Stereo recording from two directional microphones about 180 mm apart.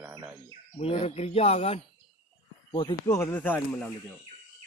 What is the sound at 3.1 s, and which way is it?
Speech, 15° left (ahead or behind).